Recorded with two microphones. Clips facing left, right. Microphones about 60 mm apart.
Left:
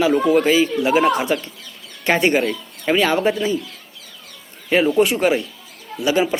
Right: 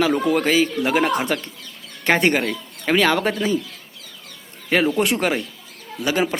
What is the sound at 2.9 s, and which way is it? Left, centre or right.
Speech, right.